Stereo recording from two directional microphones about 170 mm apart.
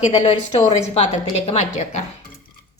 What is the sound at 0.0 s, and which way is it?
A woman's voice, 40° left (ahead or behind).